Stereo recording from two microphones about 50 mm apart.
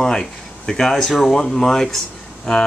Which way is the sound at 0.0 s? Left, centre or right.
Centre.